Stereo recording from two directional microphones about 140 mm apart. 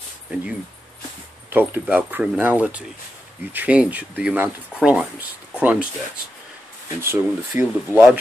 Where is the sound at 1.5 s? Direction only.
15° right (ahead or behind).